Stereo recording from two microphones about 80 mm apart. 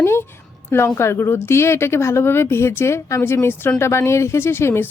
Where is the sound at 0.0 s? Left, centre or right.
Left.